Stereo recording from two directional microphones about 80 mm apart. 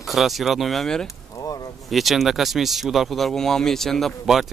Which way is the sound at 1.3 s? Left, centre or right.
Left.